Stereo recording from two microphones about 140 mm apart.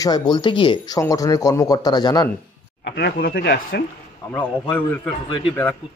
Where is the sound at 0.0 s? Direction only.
30° left (ahead or behind).